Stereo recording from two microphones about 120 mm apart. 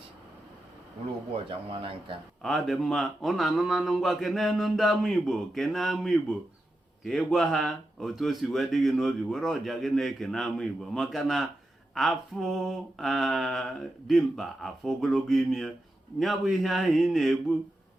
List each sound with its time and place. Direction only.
1.5 s speech: 45° right (ahead or behind)
2.4 s speech: centre (ahead or behind)